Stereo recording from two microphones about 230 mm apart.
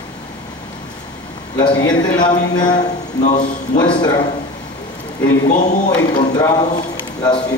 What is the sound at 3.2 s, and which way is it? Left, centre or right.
Speech, left.